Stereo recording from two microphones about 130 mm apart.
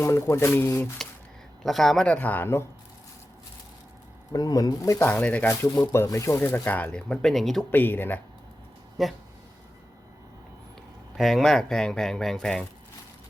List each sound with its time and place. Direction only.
0.0 s speech: 20° left (ahead or behind)
1.6 s speech: centre (ahead or behind)
2.1 s speech: 15° left (ahead or behind)
4.3 s speech: 30° left (ahead or behind)
5.0 s speech: 10° left (ahead or behind)
7.7 s speech: 15° left (ahead or behind)
9.0 s speech: centre (ahead or behind)
11.2 s speech: centre (ahead or behind)